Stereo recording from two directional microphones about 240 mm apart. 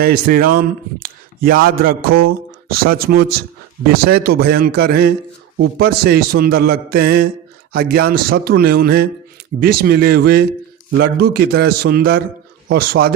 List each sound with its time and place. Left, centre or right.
0.0 s a man's voice: right